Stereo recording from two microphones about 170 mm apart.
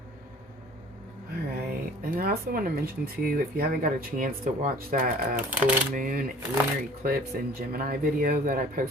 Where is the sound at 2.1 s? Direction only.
60° right (ahead or behind).